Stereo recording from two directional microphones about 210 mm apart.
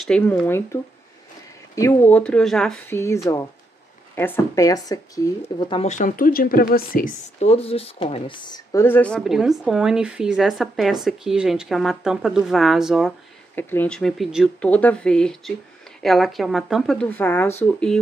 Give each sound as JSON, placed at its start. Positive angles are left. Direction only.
{"t": 0.0, "sound": "speech", "side_deg": 5}
{"t": 1.8, "sound": "speech", "side_deg": 10}
{"t": 3.0, "sound": "speech", "side_deg": 15}
{"t": 5.9, "sound": "speech", "side_deg": 40}
{"t": 13.6, "sound": "speech", "side_deg": 10}